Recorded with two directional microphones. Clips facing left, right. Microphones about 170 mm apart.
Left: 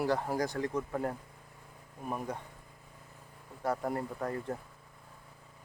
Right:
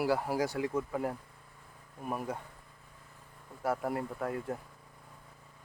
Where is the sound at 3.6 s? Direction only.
5° right (ahead or behind).